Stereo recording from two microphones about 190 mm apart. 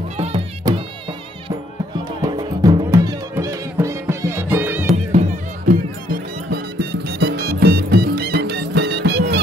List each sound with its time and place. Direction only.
0.2 s music: 25° right (ahead or behind)
2.2 s music: 20° right (ahead or behind)
5.7 s music: 50° right (ahead or behind)